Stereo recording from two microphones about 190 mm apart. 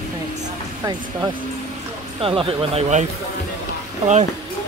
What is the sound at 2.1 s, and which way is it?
Speech, 30° right (ahead or behind).